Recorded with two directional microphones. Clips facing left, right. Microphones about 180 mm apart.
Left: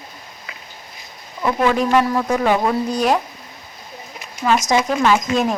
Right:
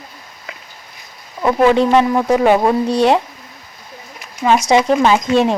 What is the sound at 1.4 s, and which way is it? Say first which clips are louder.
A woman's voice: right 5 dB; 30° right (ahead or behind).